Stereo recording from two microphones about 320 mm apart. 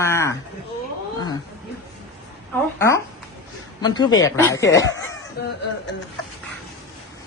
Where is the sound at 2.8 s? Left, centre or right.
Centre.